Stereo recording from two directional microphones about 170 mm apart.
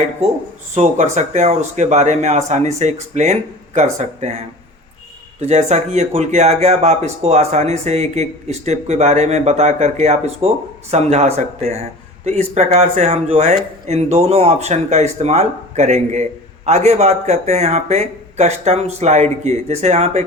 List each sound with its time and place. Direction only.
0.7 s speech: 45° right (ahead or behind)